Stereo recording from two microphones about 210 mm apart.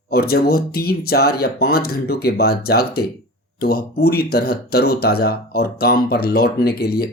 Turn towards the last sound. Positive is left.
turn(degrees=45)  # may be behind; listen again after turning